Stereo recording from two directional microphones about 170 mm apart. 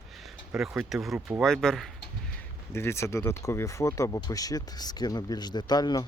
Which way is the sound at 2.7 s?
15° left (ahead or behind).